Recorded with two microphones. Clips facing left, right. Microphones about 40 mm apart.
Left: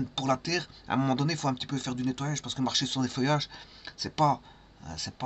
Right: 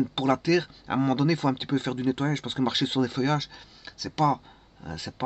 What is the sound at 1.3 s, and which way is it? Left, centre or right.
Speech, centre.